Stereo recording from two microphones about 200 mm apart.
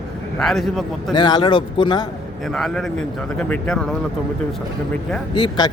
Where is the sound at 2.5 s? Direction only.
Centre (ahead or behind).